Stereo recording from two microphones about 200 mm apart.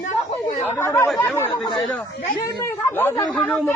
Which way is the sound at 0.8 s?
15° left (ahead or behind).